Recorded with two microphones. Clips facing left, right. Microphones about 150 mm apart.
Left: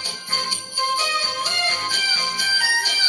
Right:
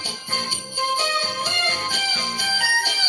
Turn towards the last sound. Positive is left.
turn(degrees=-55)  # may be behind; listen again after turning